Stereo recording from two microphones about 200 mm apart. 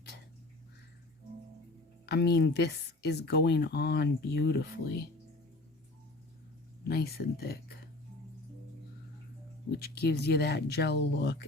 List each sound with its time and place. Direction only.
2.0 s speech: 55° left (ahead or behind)
6.8 s speech: 50° left (ahead or behind)
9.7 s speech: 55° left (ahead or behind)